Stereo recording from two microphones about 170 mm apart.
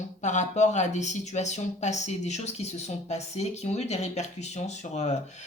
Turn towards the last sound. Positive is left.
turn(degrees=40)  # may be behind; listen again after turning